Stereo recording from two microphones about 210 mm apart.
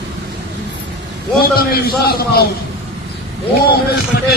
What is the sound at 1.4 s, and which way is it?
A man's voice, 45° left (ahead or behind).